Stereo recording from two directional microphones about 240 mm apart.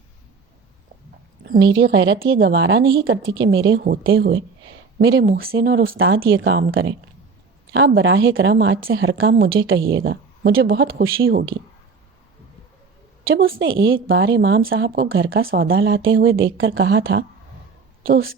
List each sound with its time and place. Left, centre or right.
1.5 s a woman's voice: right
6.0 s a woman's voice: right
9.3 s a woman's voice: right
13.2 s a woman's voice: right
14.8 s speech: right
15.1 s a woman's voice: right